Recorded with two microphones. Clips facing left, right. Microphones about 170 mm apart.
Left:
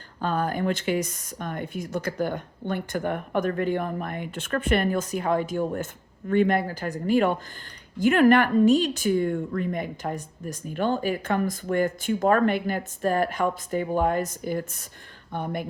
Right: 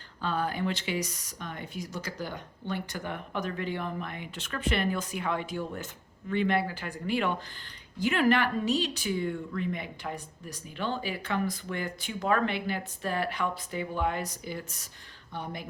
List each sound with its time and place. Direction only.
0.2 s speech: 45° left (ahead or behind)